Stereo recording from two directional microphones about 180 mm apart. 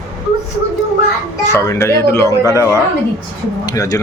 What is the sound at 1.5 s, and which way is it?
Speech, 15° left (ahead or behind).